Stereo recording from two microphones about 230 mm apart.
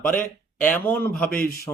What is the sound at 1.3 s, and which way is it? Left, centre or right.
Speech, left.